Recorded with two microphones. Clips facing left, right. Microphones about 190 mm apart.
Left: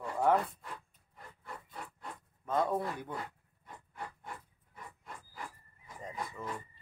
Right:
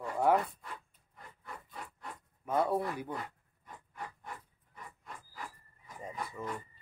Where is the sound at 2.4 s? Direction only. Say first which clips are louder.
Right 1 dB; 10° right (ahead or behind).